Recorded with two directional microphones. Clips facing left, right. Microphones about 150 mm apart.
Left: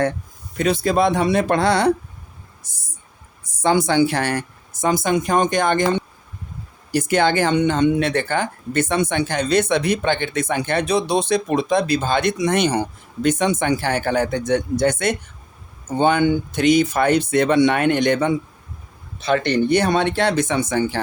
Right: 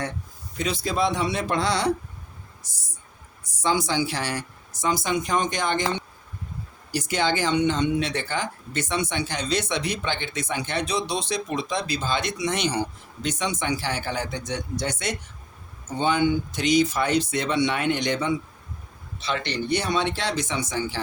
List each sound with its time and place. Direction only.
0.5 s speech: 55° left (ahead or behind)
2.6 s a sound: 55° left (ahead or behind)
3.4 s a woman's voice: 55° left (ahead or behind)